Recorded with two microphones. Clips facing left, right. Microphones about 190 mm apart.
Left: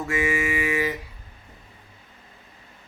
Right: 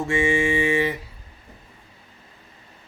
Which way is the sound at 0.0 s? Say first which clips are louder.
Right 4 dB; 30° right (ahead or behind).